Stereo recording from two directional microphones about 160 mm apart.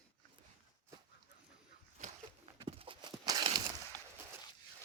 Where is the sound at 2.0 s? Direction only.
50° right (ahead or behind).